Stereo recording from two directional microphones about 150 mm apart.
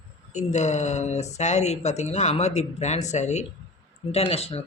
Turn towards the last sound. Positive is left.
turn(degrees=40)  # may be behind; listen again after turning